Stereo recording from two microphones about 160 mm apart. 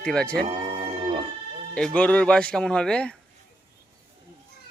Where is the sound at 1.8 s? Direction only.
5° left (ahead or behind).